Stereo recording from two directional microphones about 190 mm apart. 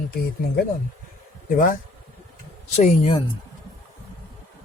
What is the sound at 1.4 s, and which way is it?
Speech, 45° left (ahead or behind).